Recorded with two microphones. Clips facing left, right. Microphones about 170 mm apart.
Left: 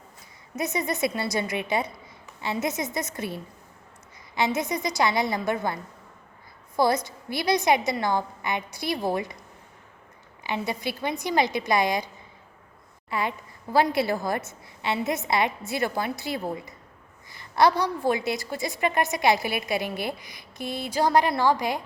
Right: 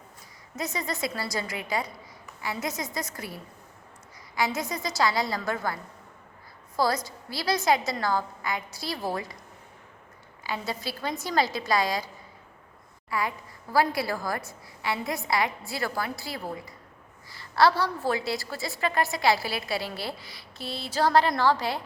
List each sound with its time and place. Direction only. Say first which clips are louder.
0.5 s a woman's voice: left 4 dB; 20° left (ahead or behind)
10.4 s a woman's voice: left 4 dB; 20° left (ahead or behind)
13.1 s a woman's voice: left 1 dB; 25° left (ahead or behind)